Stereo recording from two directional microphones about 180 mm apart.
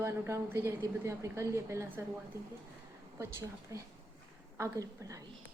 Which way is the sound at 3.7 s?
20° right (ahead or behind).